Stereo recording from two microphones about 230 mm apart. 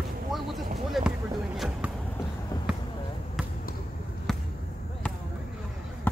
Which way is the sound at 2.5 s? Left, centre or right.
Centre.